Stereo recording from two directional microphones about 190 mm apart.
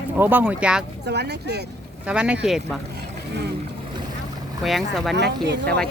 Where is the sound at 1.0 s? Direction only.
60° right (ahead or behind).